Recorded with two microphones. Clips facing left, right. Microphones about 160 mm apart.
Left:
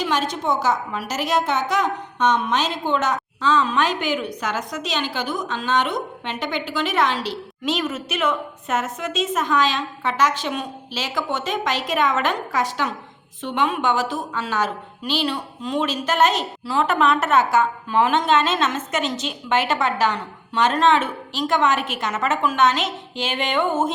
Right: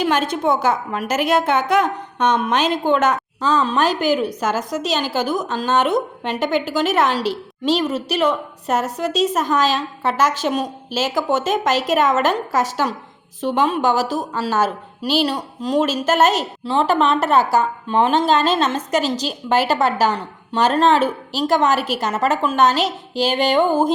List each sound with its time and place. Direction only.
0.0 s a woman's voice: 55° right (ahead or behind)
3.4 s a woman's voice: 35° right (ahead or behind)
16.6 s a woman's voice: 30° right (ahead or behind)